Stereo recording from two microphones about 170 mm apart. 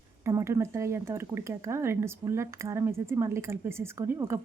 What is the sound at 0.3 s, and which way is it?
Speech, 15° right (ahead or behind).